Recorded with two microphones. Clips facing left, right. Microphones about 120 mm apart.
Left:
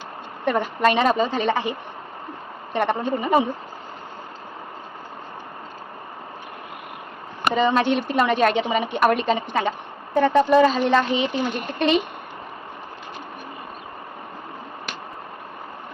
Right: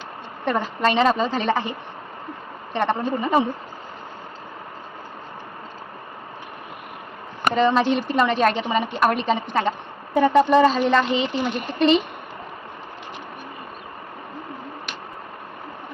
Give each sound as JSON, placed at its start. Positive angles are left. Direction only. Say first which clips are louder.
{"t": 0.4, "sound": "a woman's voice", "louder": "left 2 dB", "side_deg": 5}
{"t": 2.7, "sound": "speech", "louder": "even", "side_deg": 5}
{"t": 7.5, "sound": "a woman's voice", "louder": "right 1 dB", "side_deg": 0}
{"t": 10.2, "sound": "a woman's voice", "louder": "even", "side_deg": -10}